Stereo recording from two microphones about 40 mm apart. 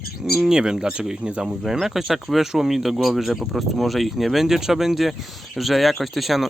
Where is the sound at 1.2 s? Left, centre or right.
Right.